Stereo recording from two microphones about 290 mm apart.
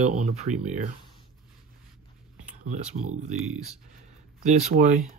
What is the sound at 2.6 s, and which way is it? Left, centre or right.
Speech, right.